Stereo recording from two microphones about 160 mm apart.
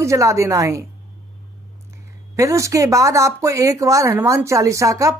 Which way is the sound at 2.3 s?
20° right (ahead or behind).